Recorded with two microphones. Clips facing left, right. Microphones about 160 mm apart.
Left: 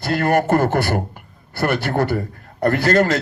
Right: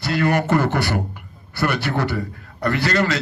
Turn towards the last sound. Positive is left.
turn(degrees=50)  # may be behind; listen again after turning